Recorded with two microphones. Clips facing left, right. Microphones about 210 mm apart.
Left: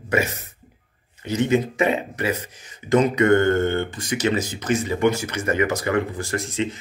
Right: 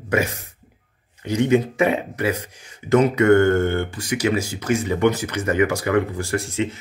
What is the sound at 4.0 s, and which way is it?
Speech, 10° right (ahead or behind).